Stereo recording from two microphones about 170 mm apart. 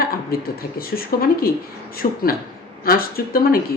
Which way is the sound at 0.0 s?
60° left (ahead or behind).